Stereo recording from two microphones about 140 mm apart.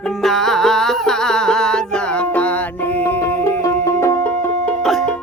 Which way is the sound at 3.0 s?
20° left (ahead or behind).